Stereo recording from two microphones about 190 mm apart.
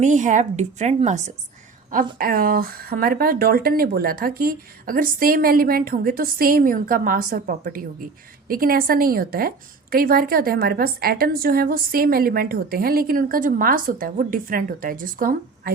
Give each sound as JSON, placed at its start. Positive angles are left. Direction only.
{"t": 0.0, "sound": "a woman's voice", "side_deg": -40}
{"t": 2.1, "sound": "speech", "side_deg": -50}